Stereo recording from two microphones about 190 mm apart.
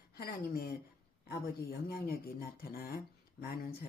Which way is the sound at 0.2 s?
50° left (ahead or behind).